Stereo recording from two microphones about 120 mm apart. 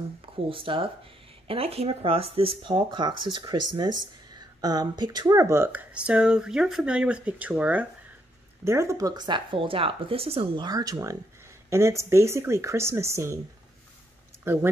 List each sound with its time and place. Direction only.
0.5 s speech: 45° right (ahead or behind); by 7.8 s 15° right (ahead or behind)
8.6 s speech: 25° right (ahead or behind)
14.4 s speech: 20° right (ahead or behind)